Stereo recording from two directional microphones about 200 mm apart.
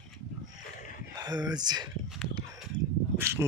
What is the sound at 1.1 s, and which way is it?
Speech, 20° right (ahead or behind).